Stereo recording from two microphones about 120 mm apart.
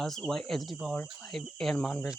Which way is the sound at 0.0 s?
5° left (ahead or behind).